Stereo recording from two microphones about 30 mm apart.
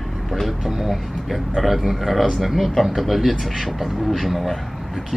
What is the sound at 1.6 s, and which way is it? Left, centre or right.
Speech, centre.